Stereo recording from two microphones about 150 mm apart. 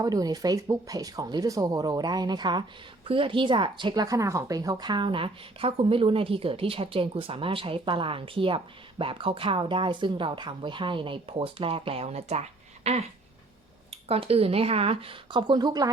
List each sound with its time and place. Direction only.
0.0 s speech: 25° right (ahead or behind)